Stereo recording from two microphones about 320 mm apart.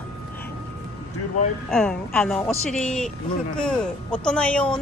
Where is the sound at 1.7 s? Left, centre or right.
Centre.